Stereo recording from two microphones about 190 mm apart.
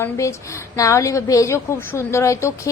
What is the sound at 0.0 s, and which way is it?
A woman's voice, 15° left (ahead or behind).